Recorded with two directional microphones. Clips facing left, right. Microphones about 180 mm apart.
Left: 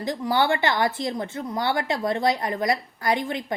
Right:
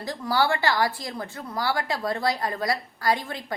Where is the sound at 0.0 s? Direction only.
20° left (ahead or behind).